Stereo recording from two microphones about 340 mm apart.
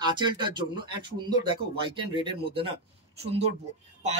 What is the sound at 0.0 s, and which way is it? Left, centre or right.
Speech, centre.